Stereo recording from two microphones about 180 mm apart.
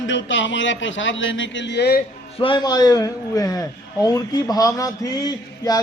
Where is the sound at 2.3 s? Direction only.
25° left (ahead or behind).